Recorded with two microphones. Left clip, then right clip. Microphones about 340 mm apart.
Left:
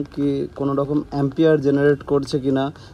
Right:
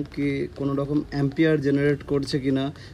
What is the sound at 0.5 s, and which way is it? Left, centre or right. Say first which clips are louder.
Speech: left 5 dB; left.